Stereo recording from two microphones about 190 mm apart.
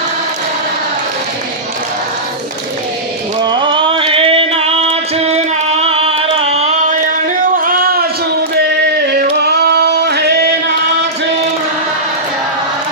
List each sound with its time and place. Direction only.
3.4 s music: 25° right (ahead or behind)
7.6 s a sound: 45° right (ahead or behind)
9.4 s male singing: 60° right (ahead or behind)